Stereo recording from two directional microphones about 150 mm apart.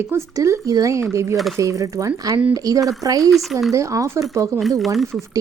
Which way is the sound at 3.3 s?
Centre (ahead or behind).